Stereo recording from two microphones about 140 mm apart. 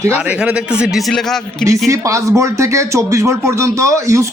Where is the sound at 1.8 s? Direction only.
20° right (ahead or behind).